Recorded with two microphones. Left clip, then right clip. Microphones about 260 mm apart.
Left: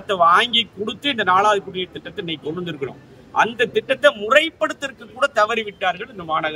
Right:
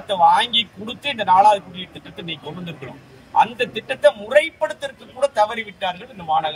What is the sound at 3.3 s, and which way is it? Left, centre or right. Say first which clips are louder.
A man's voice: even; left.